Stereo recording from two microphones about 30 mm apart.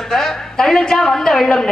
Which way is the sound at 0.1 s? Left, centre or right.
Centre.